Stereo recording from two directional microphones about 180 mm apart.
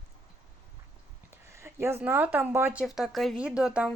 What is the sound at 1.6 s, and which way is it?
Speech, 15° right (ahead or behind).